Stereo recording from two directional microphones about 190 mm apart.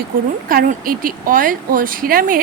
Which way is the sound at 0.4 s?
50° right (ahead or behind).